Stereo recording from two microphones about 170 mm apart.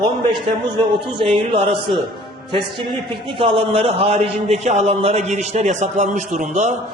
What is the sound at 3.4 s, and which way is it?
A man's voice, 35° right (ahead or behind).